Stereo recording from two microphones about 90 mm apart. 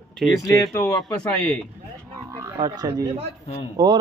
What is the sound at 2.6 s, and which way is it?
Speech, 50° right (ahead or behind).